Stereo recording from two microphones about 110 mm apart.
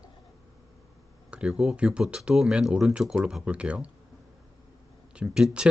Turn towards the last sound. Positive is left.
turn(degrees=-5)  # may be behind; listen again after turning